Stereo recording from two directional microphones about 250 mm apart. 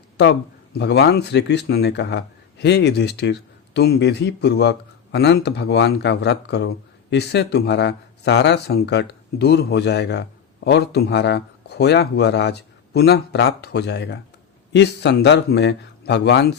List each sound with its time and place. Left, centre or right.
0.2 s a man's voice: left